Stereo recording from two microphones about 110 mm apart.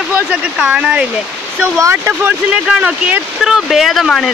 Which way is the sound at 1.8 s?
25° right (ahead or behind).